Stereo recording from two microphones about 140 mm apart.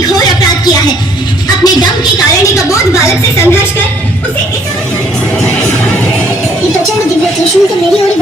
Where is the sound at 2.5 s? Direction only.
20° left (ahead or behind).